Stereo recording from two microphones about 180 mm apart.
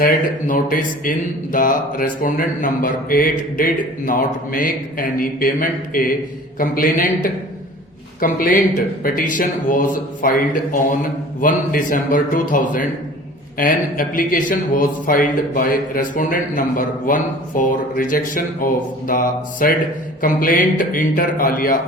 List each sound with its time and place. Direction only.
0.0 s speech: 50° left (ahead or behind)